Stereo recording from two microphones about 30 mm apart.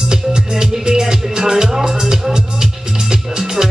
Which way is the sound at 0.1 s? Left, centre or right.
Right.